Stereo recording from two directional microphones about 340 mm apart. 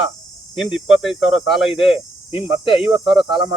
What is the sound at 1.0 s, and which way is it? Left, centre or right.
Speech, centre.